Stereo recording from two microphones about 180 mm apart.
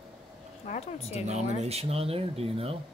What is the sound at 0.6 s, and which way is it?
Speech, 40° left (ahead or behind).